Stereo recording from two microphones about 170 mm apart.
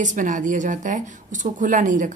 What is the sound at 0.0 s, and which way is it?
A woman's voice, 45° right (ahead or behind).